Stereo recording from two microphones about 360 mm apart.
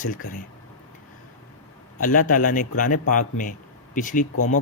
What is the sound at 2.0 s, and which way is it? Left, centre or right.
Speech, left.